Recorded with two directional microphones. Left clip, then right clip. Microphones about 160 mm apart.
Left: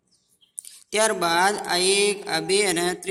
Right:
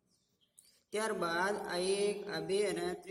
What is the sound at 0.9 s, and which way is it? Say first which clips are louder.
Speech: left 14 dB; 20° left (ahead or behind).